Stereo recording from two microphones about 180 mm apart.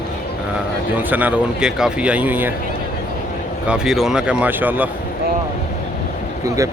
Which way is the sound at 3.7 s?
Centre (ahead or behind).